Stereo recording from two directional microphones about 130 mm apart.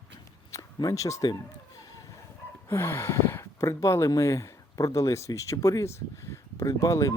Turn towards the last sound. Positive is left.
turn(degrees=25)  # may be behind; listen again after turning